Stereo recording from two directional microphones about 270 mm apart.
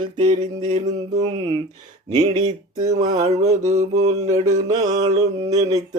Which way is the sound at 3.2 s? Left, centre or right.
Right.